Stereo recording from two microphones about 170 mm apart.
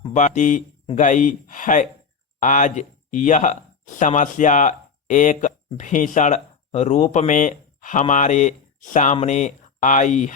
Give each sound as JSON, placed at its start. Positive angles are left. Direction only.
{"t": 0.1, "sound": "speech", "side_deg": 45}